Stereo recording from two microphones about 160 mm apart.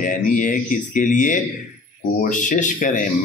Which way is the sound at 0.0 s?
55° left (ahead or behind).